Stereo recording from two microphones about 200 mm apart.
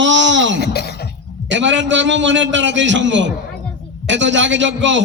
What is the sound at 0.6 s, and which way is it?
Speech, 55° left (ahead or behind).